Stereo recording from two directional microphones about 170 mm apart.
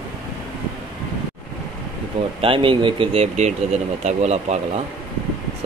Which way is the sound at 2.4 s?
30° right (ahead or behind).